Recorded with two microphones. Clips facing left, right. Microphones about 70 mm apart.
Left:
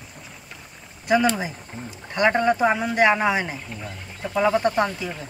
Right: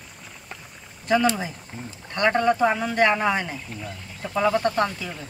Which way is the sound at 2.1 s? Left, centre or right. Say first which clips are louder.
Left 1 dB; centre.